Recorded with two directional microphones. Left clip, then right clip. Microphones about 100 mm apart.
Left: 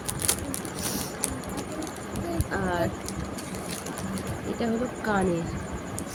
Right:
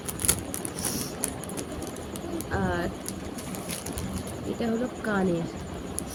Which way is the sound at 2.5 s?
15° right (ahead or behind).